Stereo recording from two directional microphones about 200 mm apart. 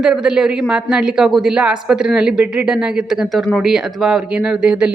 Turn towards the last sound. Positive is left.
turn(degrees=-5)  # may be behind; listen again after turning